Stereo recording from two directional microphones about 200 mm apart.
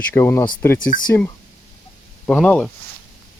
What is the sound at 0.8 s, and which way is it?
Speech, 40° left (ahead or behind).